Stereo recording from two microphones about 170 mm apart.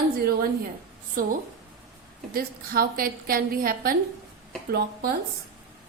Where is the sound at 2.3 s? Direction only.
60° right (ahead or behind).